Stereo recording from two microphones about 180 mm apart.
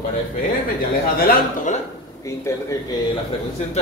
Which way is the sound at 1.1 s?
50° left (ahead or behind).